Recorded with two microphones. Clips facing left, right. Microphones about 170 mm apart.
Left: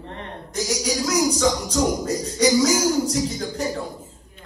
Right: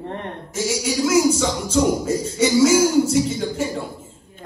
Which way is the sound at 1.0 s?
5° right (ahead or behind).